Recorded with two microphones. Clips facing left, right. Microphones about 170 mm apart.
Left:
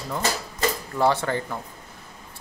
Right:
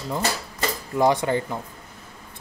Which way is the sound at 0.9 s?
15° right (ahead or behind).